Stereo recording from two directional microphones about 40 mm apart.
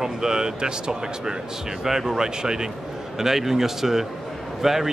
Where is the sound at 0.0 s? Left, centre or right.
Centre.